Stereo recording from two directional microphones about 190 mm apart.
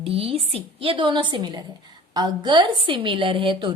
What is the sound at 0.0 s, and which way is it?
A woman's voice, 30° right (ahead or behind).